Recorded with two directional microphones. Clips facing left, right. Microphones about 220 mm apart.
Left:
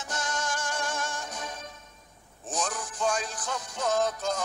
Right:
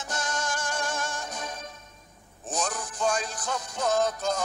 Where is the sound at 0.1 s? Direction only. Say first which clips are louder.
Right 1 dB; 40° right (ahead or behind).